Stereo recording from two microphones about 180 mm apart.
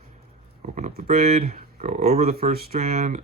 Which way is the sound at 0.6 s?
45° right (ahead or behind).